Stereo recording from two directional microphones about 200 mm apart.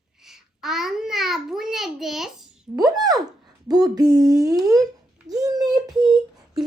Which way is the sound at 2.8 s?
20° right (ahead or behind).